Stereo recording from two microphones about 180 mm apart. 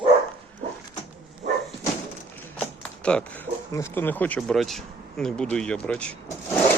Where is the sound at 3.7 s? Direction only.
15° left (ahead or behind).